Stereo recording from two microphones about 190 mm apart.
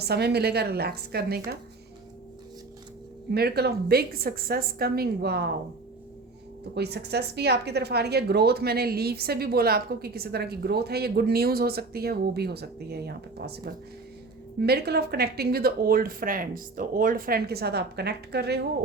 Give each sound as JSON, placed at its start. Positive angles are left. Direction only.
{"t": 0.0, "sound": "a woman's voice", "side_deg": -60}
{"t": 3.3, "sound": "a woman's voice", "side_deg": -55}
{"t": 6.7, "sound": "a woman's voice", "side_deg": -60}